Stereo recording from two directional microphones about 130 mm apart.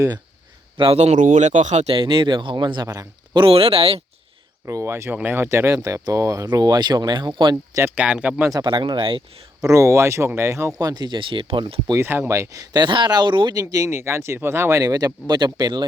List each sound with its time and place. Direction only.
0.8 s speech: 50° right (ahead or behind)
2.0 s speech: 40° right (ahead or behind)
4.6 s speech: 20° right (ahead or behind)
7.9 s speech: 10° right (ahead or behind)
8.5 s speech: 35° right (ahead or behind)
9.6 s speech: 25° right (ahead or behind); by 11.9 s 40° right (ahead or behind)
11.9 s speech: 20° right (ahead or behind)